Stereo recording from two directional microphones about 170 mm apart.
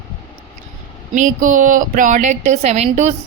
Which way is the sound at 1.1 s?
50° right (ahead or behind).